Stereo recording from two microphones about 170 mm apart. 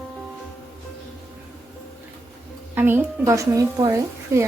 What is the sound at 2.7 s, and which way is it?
A woman's voice, 15° right (ahead or behind).